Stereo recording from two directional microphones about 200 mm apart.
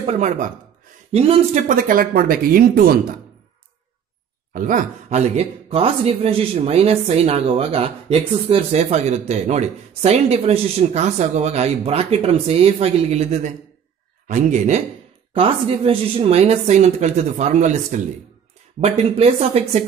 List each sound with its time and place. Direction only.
0.0 s speech: 35° right (ahead or behind)
4.6 s speech: 40° right (ahead or behind)